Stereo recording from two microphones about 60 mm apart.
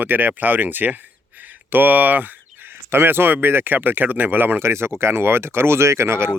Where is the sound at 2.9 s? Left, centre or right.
Right.